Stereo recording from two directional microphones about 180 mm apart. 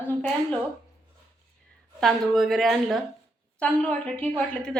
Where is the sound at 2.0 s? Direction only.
Centre (ahead or behind).